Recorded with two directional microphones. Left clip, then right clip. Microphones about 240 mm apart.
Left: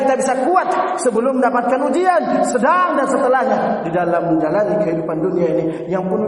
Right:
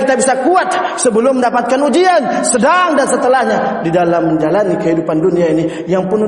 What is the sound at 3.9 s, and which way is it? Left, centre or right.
A man's voice, right.